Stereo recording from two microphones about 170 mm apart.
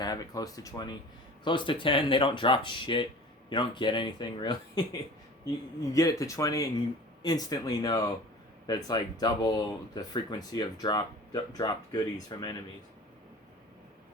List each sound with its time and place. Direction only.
0.0 s speech: 20° left (ahead or behind)
5.9 s speech: 20° left (ahead or behind)